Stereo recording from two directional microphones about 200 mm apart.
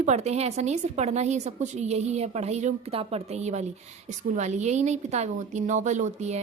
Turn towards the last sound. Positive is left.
turn(degrees=-35)  # may be behind; listen again after turning